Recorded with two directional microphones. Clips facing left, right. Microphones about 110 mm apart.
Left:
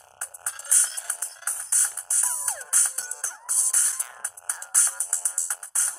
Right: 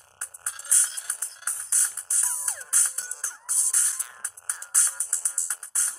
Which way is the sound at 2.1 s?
60° left (ahead or behind).